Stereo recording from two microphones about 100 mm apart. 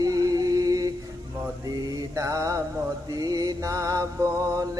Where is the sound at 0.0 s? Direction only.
40° right (ahead or behind).